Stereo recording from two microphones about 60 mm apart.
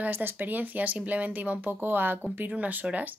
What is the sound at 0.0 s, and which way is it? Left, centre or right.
Speech, right.